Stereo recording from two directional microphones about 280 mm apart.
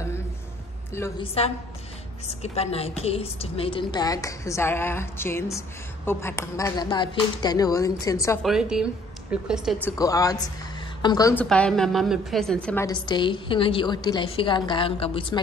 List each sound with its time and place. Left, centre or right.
1.2 s a woman's voice: left
8.5 s a woman's voice: centre
9.8 s a woman's voice: centre